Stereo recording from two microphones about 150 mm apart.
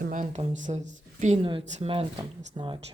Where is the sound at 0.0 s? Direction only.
55° right (ahead or behind).